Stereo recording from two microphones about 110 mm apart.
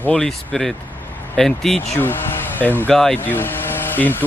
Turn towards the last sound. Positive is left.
turn(degrees=15)  # may be behind; listen again after turning